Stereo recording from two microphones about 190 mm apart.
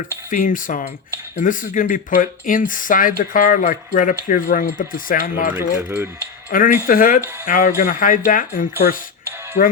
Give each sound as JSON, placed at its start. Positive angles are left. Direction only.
{"t": 0.3, "sound": "speech", "side_deg": 45}
{"t": 5.5, "sound": "speech", "side_deg": -10}
{"t": 6.5, "sound": "speech", "side_deg": 50}